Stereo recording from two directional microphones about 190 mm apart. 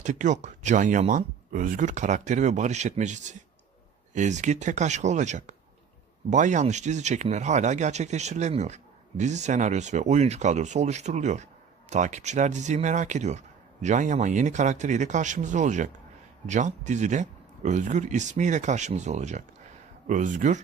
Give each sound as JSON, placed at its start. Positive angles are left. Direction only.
{"t": 0.0, "sound": "speech", "side_deg": -40}